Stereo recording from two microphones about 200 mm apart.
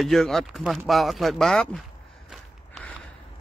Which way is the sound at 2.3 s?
Centre (ahead or behind).